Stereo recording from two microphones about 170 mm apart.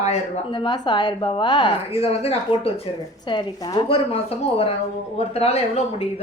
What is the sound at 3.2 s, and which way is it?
A woman's voice, 25° left (ahead or behind).